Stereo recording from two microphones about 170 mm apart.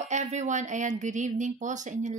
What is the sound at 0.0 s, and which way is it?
Speech, 45° right (ahead or behind).